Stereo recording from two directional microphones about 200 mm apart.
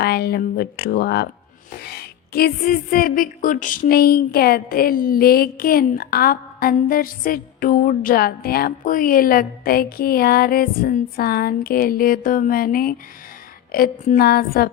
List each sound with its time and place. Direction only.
0.0 s speech: 55° left (ahead or behind)